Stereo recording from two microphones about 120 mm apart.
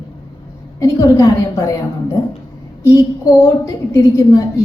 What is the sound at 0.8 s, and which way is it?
Speech, 25° left (ahead or behind).